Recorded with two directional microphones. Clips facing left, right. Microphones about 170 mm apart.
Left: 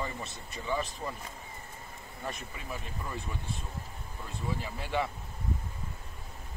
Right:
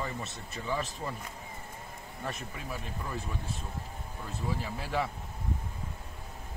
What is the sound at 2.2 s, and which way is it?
Speech, centre (ahead or behind).